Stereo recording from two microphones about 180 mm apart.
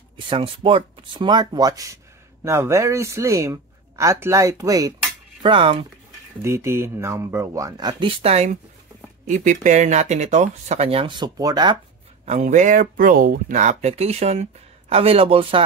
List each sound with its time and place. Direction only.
0.3 s speech: 30° right (ahead or behind)
6.4 s speech: 15° right (ahead or behind)
12.3 s speech: 45° right (ahead or behind)